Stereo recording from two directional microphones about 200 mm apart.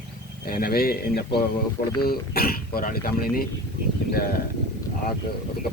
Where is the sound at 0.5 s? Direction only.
50° left (ahead or behind).